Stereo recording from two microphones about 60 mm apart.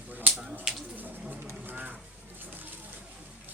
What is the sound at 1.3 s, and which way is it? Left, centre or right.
Vehicle, right.